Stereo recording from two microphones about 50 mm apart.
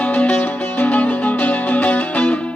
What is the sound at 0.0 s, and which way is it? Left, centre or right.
Music, left.